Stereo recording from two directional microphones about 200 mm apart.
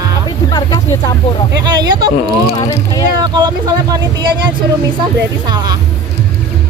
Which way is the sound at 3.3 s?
20° right (ahead or behind).